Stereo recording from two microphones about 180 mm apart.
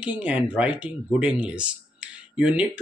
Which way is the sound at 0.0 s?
10° right (ahead or behind).